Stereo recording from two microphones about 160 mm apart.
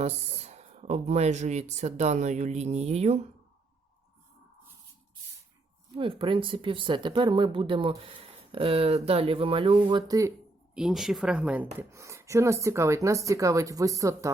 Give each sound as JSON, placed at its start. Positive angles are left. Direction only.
{"t": 0.0, "sound": "speech", "side_deg": -40}
{"t": 6.0, "sound": "speech", "side_deg": -35}
{"t": 10.8, "sound": "speech", "side_deg": 0}